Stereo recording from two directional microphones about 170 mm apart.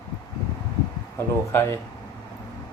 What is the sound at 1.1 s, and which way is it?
Speech, 15° left (ahead or behind).